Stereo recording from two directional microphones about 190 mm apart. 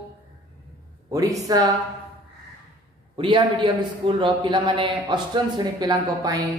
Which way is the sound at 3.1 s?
25° right (ahead or behind).